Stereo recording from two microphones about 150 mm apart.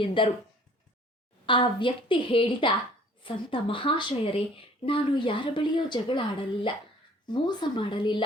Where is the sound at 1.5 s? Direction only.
35° left (ahead or behind).